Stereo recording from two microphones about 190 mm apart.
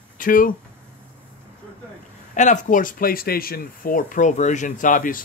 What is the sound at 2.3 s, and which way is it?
Speech, 40° left (ahead or behind).